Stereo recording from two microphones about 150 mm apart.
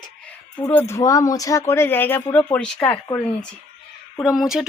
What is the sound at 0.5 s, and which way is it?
Speech, 15° left (ahead or behind).